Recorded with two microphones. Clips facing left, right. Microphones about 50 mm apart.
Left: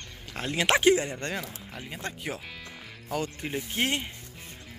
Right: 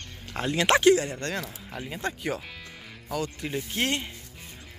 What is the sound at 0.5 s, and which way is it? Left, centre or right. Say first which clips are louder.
Speech: right 2 dB; centre.